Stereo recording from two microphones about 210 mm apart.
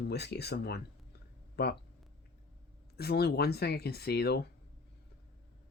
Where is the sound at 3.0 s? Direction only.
50° left (ahead or behind).